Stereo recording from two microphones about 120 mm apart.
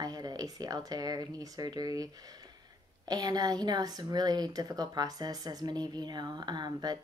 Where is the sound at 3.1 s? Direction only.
35° right (ahead or behind).